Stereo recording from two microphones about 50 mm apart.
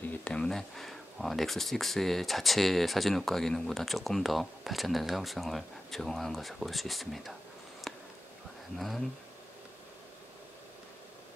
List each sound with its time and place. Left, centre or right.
0.2 s speech: left
0.5 s speech: centre
7.9 s a sound: centre
8.7 s speech: centre